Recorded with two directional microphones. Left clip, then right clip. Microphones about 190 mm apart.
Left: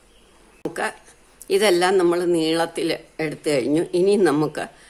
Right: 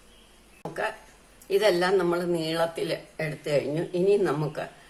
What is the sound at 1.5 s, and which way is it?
Speech, 55° left (ahead or behind).